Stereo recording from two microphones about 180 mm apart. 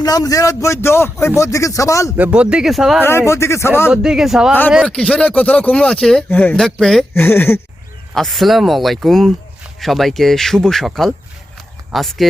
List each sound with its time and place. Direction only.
0.0 s a man's voice: 20° left (ahead or behind)
2.1 s speech: 5° right (ahead or behind)
3.0 s a man's voice: 15° left (ahead or behind)
3.9 s speech: 5° right (ahead or behind)
7.1 s a man's voice: 10° left (ahead or behind)
8.1 s speech: centre (ahead or behind)